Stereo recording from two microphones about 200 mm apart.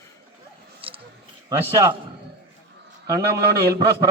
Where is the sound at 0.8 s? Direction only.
25° right (ahead or behind).